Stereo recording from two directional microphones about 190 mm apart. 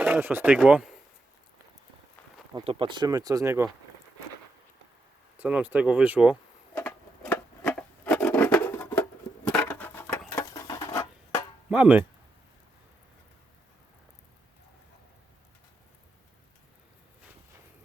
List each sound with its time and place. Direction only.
0.0 s speech: 10° right (ahead or behind)
2.6 s speech: 25° right (ahead or behind)
5.4 s speech: 5° right (ahead or behind)
6.7 s rub: 10° left (ahead or behind)
9.0 s patter: 5° left (ahead or behind)
11.7 s speech: 5° right (ahead or behind)